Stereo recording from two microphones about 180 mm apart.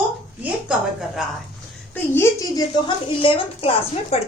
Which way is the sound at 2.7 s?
30° left (ahead or behind).